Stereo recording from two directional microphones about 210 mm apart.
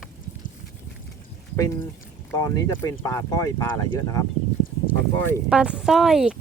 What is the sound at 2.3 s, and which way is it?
Speech, 15° left (ahead or behind).